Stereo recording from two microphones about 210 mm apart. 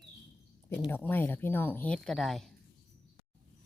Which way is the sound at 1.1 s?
10° left (ahead or behind).